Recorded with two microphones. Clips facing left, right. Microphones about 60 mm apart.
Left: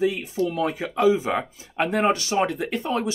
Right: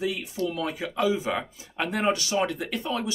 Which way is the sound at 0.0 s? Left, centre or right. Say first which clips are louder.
Left 5 dB; left.